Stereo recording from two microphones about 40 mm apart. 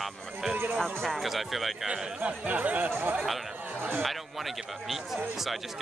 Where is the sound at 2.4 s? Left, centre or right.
Right.